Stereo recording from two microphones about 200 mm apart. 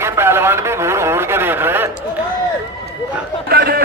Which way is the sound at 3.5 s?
50° right (ahead or behind).